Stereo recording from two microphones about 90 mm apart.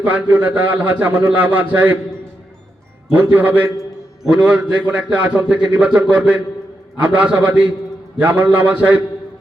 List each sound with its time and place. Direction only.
0.0 s a man's voice: 15° right (ahead or behind)
3.1 s a man's voice: 20° right (ahead or behind)